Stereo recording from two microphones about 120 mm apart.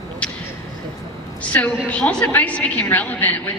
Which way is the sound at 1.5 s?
15° left (ahead or behind).